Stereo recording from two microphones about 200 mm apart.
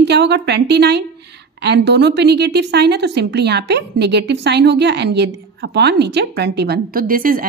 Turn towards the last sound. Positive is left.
turn(degrees=-45)  # may be behind; listen again after turning